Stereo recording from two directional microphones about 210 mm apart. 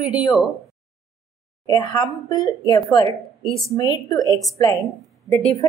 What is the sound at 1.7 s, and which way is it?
A woman's voice, 20° left (ahead or behind).